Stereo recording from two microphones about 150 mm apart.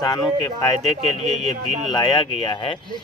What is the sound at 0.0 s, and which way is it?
Speech, 25° left (ahead or behind).